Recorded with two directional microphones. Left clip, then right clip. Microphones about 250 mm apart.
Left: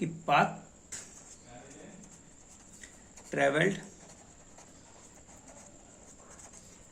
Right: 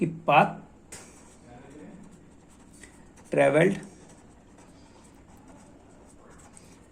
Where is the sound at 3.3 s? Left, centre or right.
Right.